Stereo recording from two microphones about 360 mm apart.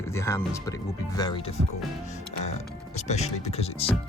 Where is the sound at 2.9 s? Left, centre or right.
Centre.